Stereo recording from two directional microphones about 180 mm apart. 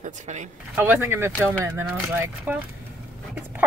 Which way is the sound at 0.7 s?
10° right (ahead or behind).